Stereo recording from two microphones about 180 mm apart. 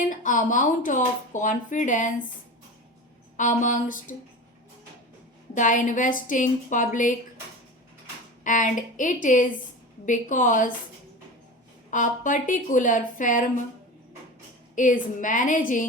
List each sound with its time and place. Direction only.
0.1 s speech: 45° left (ahead or behind)
3.3 s speech: 45° left (ahead or behind)
5.5 s speech: 45° left (ahead or behind)
8.4 s speech: 45° left (ahead or behind)
11.9 s speech: 45° left (ahead or behind)
14.8 s speech: 45° left (ahead or behind)